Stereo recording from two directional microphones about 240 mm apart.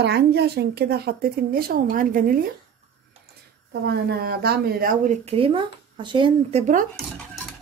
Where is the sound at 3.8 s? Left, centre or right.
Right; by 6.6 s centre.